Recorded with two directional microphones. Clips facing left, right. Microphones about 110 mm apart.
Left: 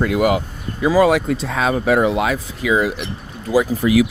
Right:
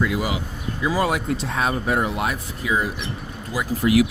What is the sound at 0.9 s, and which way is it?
Speech, 90° left.